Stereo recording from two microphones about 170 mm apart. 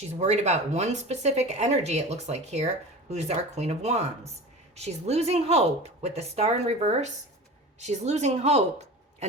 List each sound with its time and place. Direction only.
0.1 s speech: 40° right (ahead or behind)